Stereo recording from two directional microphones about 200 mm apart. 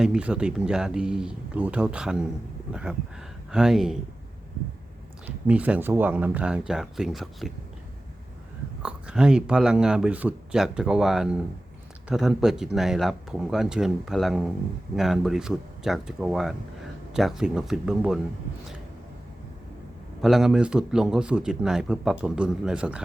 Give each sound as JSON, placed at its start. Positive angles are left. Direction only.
{"t": 0.0, "sound": "speech", "side_deg": -5}
{"t": 3.5, "sound": "speech", "side_deg": -5}
{"t": 5.2, "sound": "speech", "side_deg": -5}
{"t": 8.8, "sound": "speech", "side_deg": -5}
{"t": 20.2, "sound": "speech", "side_deg": 0}